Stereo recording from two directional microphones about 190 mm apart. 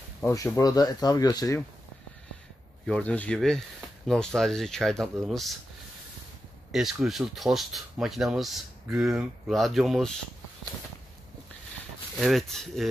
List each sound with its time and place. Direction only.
0.2 s speech: 15° left (ahead or behind)
2.9 s speech: 5° left (ahead or behind)
6.7 s speech: centre (ahead or behind)
12.2 s speech: centre (ahead or behind)